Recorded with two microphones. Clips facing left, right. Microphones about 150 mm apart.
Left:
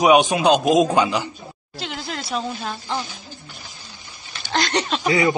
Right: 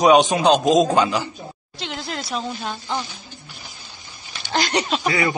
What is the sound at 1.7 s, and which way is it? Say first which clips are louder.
Speech: even; centre (ahead or behind).